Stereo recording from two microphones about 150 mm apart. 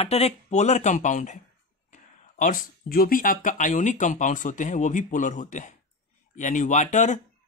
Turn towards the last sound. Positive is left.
turn(degrees=55)  # may be behind; listen again after turning